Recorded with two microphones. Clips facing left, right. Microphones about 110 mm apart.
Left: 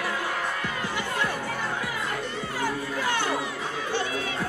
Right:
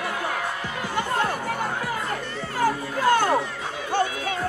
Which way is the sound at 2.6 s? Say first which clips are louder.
Right 7 dB; 45° right (ahead or behind).